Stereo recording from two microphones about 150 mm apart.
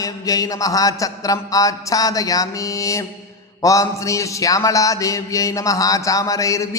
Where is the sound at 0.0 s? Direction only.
25° left (ahead or behind).